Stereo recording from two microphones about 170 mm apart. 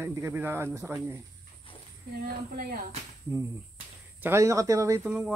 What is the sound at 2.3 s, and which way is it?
Speech, 60° right (ahead or behind).